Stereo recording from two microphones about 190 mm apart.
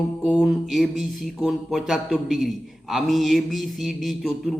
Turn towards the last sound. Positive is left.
turn(degrees=0)  # may be behind; listen again after turning